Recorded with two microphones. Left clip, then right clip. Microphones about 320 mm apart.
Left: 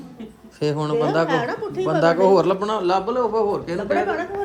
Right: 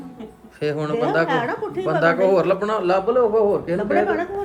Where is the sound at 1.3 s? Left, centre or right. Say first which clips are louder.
Even; right.